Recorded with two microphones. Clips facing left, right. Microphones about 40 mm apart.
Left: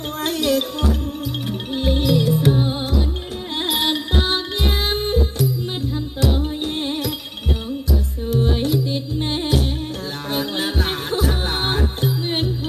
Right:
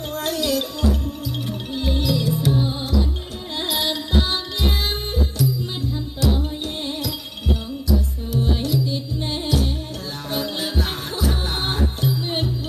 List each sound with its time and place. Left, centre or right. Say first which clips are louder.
0.3 s music: left 3 dB; left
8.4 s music: left 2 dB; left
8.6 s music: left 2 dB; left